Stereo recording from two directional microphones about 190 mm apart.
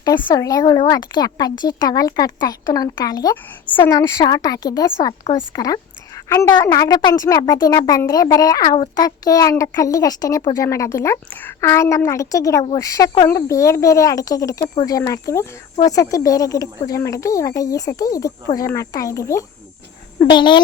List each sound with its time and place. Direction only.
0.3 s a child's voice: 20° left (ahead or behind)